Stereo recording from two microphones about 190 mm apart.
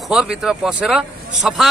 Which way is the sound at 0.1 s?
5° right (ahead or behind).